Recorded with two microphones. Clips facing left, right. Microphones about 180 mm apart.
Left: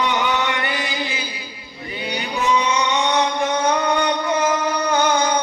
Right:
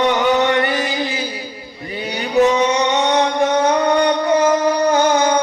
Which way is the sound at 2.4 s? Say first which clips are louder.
Right 5 dB; 40° right (ahead or behind).